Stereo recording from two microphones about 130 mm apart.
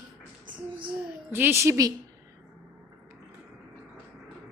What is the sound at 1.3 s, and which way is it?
Speech, 15° right (ahead or behind).